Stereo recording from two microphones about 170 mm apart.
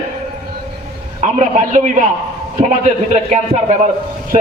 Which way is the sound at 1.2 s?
45° right (ahead or behind).